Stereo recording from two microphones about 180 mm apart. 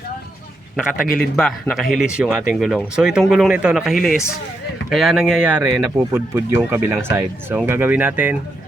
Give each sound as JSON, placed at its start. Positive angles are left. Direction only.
{"t": 0.9, "sound": "a man's voice", "side_deg": 55}
{"t": 1.4, "sound": "speech", "side_deg": 5}